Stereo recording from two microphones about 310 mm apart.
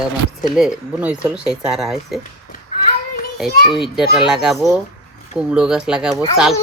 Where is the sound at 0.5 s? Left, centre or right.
Centre.